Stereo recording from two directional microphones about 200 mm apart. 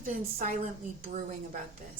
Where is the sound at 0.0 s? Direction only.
40° right (ahead or behind).